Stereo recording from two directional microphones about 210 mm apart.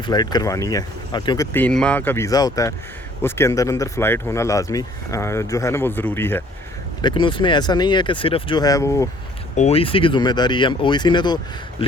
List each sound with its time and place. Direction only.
0.0 s speech: 20° left (ahead or behind)
1.5 s speech: 5° left (ahead or behind)
7.0 s speech: 25° left (ahead or behind)
9.6 s speech: 30° left (ahead or behind)